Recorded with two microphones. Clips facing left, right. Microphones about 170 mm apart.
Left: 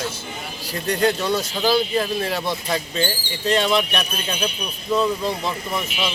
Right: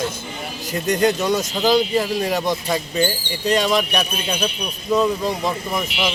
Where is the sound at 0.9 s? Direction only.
15° right (ahead or behind).